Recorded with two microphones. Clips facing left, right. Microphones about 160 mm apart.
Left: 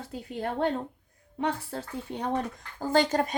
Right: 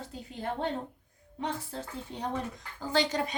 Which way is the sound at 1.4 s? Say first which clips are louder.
Left 5 dB; 65° left (ahead or behind).